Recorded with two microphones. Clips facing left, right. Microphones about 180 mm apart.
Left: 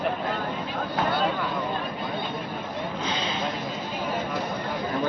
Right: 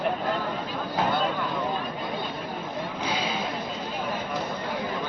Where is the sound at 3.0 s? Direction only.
10° right (ahead or behind).